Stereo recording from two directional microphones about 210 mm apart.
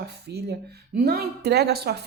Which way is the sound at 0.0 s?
50° right (ahead or behind).